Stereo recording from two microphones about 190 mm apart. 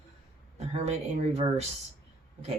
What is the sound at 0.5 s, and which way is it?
Speech, 35° right (ahead or behind).